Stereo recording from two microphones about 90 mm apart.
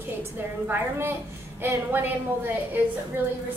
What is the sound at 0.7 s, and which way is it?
A woman's voice, 25° right (ahead or behind).